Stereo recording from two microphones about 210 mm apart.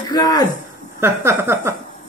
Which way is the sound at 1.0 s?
10° right (ahead or behind).